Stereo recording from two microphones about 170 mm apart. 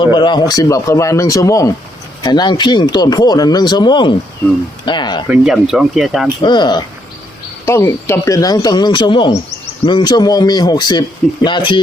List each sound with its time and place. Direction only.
0.0 s speech: 25° left (ahead or behind)
5.3 s speech: 5° right (ahead or behind)
6.4 s speech: 25° left (ahead or behind)
7.6 s speech: 15° left (ahead or behind)